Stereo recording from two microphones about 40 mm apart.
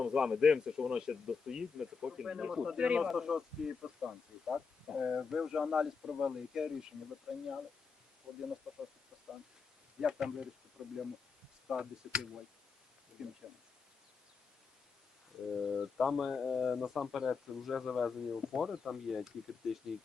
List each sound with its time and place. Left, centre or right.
0.0 s speech: centre
2.7 s speech: right
3.0 s speech: centre
10.0 s speech: centre
13.2 s speech: centre
15.6 s speech: centre